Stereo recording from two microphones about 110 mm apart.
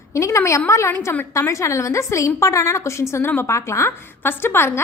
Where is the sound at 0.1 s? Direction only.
25° left (ahead or behind).